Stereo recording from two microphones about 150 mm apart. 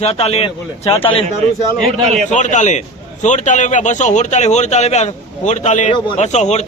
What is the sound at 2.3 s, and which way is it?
A man's voice, 50° left (ahead or behind).